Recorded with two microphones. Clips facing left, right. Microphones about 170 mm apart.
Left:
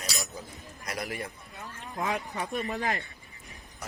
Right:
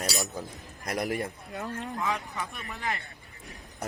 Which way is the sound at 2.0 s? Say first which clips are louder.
Left 3 dB; 40° left (ahead or behind).